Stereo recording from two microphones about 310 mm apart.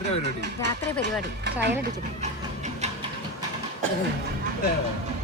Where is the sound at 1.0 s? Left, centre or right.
Right.